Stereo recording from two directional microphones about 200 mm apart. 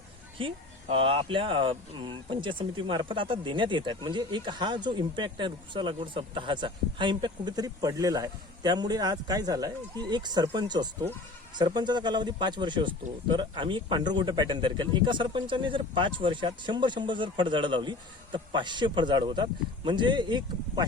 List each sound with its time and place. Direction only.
0.3 s speech: 25° right (ahead or behind)